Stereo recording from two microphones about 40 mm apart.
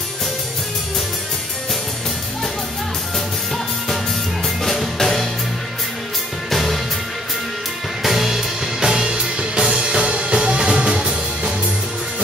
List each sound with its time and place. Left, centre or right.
4.6 s music: centre
6.5 s music: centre
8.0 s music: centre; by 11.1 s right